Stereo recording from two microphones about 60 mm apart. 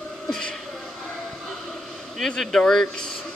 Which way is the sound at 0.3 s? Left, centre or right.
Centre.